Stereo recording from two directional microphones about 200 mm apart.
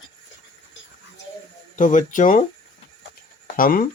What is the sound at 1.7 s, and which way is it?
Speech, 40° left (ahead or behind).